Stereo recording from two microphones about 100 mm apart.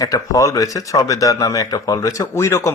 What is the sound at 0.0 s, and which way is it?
A man's voice, 35° left (ahead or behind).